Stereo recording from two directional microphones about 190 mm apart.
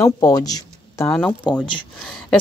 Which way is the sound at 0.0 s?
20° left (ahead or behind).